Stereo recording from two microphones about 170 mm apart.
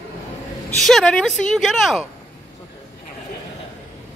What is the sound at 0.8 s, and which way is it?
Speech, 5° left (ahead or behind).